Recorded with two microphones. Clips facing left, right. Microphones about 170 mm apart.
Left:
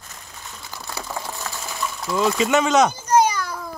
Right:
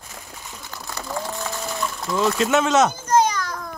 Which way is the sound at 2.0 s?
Centre (ahead or behind).